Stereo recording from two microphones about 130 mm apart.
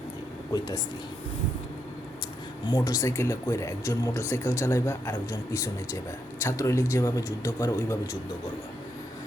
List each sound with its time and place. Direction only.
2.6 s speech: 30° left (ahead or behind)